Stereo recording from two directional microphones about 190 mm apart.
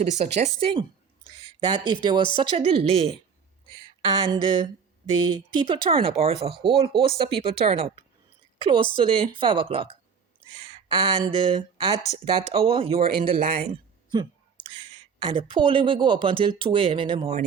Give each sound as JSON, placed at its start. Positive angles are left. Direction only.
{"t": 0.0, "sound": "speech", "side_deg": -35}
{"t": 4.2, "sound": "a woman's voice", "side_deg": -25}